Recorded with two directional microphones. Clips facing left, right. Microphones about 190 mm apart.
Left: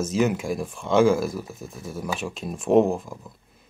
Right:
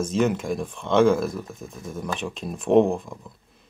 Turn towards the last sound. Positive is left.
turn(degrees=0)  # may be behind; listen again after turning